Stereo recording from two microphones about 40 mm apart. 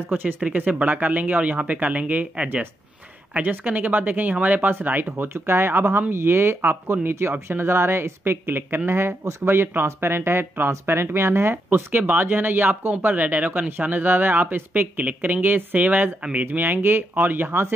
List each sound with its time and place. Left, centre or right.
0.4 s speech: right
3.4 s speech: right
6.6 s speech: right
11.5 s speech: right
13.0 s speech: right
16.2 s speech: right
16.4 s speech: right
17.1 s speech: right